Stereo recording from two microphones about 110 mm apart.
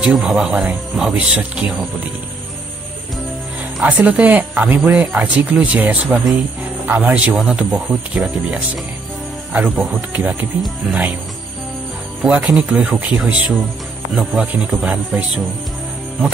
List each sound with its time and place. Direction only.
0.0 s speech: 5° right (ahead or behind)
3.8 s speech: 15° right (ahead or behind)
12.2 s speech: 10° right (ahead or behind)